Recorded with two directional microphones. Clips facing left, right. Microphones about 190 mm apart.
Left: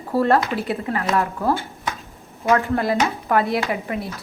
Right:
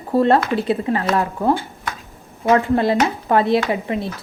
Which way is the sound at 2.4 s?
20° right (ahead or behind).